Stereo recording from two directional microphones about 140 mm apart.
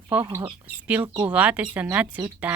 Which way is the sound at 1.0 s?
30° right (ahead or behind).